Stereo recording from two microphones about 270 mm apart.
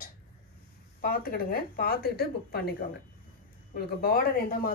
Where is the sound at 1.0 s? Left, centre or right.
Left.